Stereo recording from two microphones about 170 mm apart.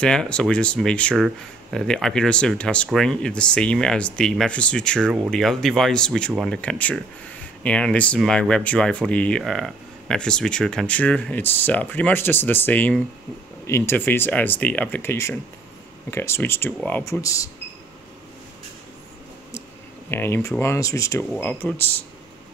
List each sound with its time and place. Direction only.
0.0 s speech: 5° left (ahead or behind)
20.1 s speech: 10° left (ahead or behind)